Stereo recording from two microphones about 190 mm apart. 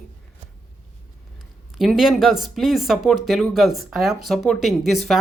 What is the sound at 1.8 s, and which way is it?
Speech, centre (ahead or behind).